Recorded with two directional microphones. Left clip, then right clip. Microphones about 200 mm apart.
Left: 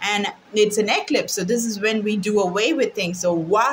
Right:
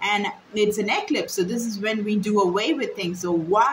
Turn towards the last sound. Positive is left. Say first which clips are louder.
# left 1 dB
turn(degrees=40)  # may be behind; listen again after turning